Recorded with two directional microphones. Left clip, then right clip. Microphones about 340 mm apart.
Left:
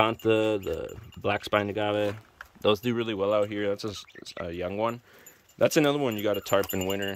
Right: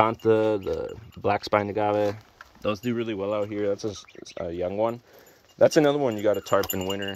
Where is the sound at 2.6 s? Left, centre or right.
Centre.